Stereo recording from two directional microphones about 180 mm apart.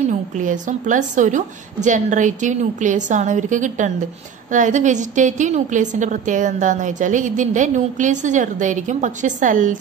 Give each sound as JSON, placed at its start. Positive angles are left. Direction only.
{"t": 0.0, "sound": "a woman's voice", "side_deg": -45}